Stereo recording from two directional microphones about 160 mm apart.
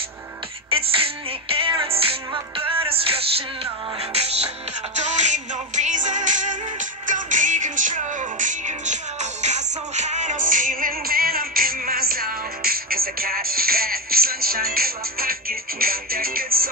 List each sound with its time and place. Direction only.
0.7 s music: 35° right (ahead or behind); by 16.6 s 65° right (ahead or behind)